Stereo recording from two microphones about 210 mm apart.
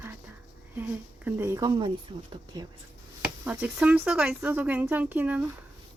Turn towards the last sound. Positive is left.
turn(degrees=-10)  # may be behind; listen again after turning